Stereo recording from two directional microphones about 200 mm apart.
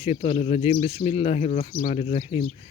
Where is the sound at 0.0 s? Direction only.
30° left (ahead or behind).